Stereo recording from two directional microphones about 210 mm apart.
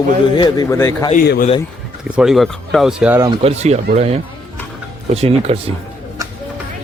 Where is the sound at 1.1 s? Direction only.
45° left (ahead or behind).